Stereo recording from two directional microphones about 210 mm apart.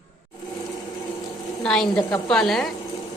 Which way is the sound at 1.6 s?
5° left (ahead or behind).